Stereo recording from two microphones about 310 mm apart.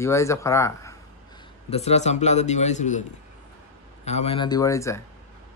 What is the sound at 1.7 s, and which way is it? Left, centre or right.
A man's voice, left.